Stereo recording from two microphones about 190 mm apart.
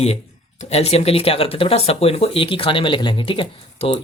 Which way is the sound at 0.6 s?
35° left (ahead or behind).